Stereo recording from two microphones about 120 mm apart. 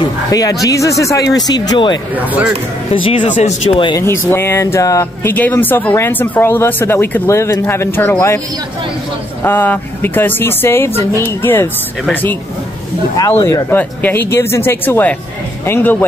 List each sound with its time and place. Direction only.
0.3 s speech: 30° left (ahead or behind)
2.1 s speech: 15° right (ahead or behind)
2.9 s speech: 55° left (ahead or behind)
3.2 s speech: 80° left
3.9 s speech: 20° left (ahead or behind)
5.3 s speech: 15° left (ahead or behind)
9.4 s speech: 15° left (ahead or behind)